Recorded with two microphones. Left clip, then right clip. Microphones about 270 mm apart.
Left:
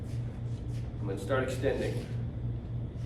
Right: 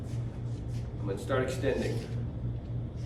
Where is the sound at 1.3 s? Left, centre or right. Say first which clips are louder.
Even; centre.